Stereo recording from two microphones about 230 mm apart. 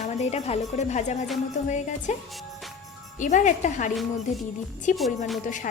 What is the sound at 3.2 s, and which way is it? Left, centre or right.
Speech, left.